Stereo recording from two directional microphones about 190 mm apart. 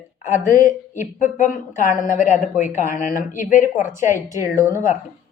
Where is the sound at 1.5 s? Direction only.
40° left (ahead or behind).